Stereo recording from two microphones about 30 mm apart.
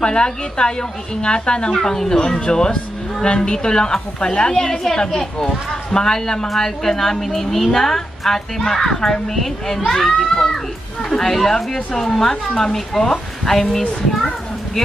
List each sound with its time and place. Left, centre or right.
0.0 s speech: left
1.7 s a woman's voice: centre
9.9 s a woman's voice: centre